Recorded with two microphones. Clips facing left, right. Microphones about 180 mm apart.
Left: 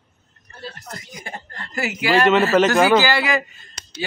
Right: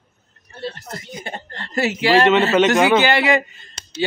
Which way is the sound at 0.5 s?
25° right (ahead or behind).